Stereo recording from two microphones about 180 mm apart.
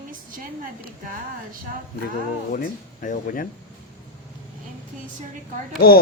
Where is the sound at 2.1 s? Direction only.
50° left (ahead or behind).